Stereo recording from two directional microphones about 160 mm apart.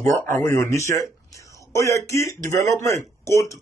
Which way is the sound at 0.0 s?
15° left (ahead or behind).